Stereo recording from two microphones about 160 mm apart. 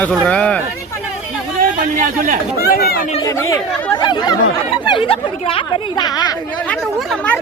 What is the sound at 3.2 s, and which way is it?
Speech, 20° left (ahead or behind).